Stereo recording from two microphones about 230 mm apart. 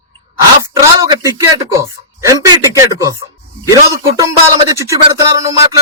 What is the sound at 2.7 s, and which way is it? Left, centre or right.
Speech, centre.